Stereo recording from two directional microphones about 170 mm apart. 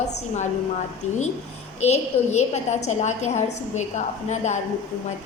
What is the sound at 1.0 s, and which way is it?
A woman's voice, 40° left (ahead or behind).